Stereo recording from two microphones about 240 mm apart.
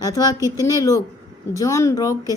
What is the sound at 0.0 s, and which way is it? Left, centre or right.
Speech, centre.